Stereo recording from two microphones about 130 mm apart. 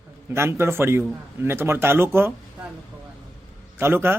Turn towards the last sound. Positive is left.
turn(degrees=-20)  # may be behind; listen again after turning